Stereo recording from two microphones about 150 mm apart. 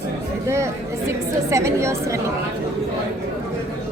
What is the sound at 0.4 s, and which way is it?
A woman's voice, 20° right (ahead or behind).